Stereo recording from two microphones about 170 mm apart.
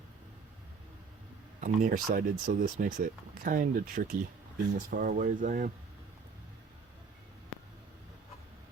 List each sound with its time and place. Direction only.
1.6 s speech: 50° right (ahead or behind)